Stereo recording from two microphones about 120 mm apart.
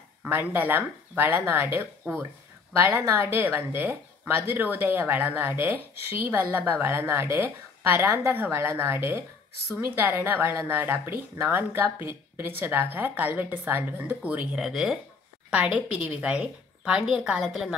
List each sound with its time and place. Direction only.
0.2 s a woman's voice: 15° right (ahead or behind)